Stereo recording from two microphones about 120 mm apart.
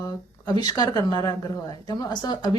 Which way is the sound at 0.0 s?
35° left (ahead or behind).